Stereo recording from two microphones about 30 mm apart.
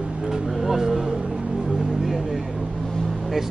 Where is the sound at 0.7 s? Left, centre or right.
Centre.